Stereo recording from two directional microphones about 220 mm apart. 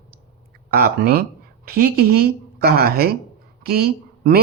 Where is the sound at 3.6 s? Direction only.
45° right (ahead or behind).